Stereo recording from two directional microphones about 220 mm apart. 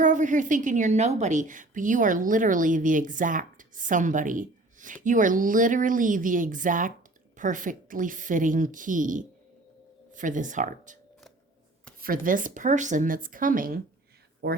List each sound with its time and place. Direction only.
0.0 s a woman's voice: 35° right (ahead or behind)
12.0 s a woman's voice: 40° right (ahead or behind)